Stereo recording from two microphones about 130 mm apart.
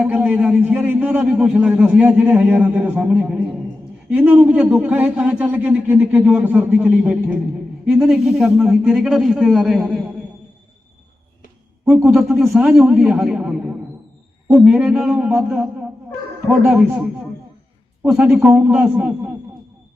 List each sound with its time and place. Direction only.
0.0 s a man's voice: 10° right (ahead or behind)
12.4 s a man's voice: 5° right (ahead or behind)
18.0 s a man's voice: 5° right (ahead or behind)
18.3 s a man's voice: 20° right (ahead or behind)
18.7 s a man's voice: 5° right (ahead or behind)